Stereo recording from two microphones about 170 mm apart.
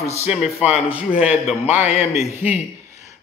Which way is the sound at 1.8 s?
40° left (ahead or behind).